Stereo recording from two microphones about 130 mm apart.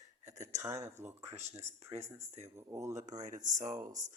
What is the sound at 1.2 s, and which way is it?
Speech, 55° right (ahead or behind).